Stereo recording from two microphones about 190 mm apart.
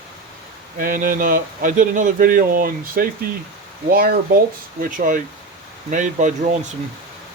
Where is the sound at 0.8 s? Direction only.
50° right (ahead or behind).